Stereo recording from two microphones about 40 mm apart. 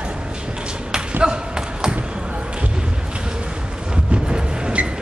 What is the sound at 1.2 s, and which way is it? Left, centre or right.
Basketball bounce, right.